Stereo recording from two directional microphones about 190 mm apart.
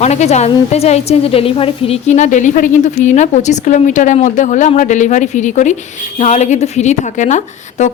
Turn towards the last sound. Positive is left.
turn(degrees=40)  # may be behind; listen again after turning